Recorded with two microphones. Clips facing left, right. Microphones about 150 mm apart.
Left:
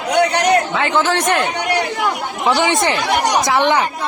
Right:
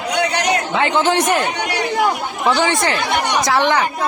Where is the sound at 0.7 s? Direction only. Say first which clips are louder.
Right 1 dB; 20° right (ahead or behind).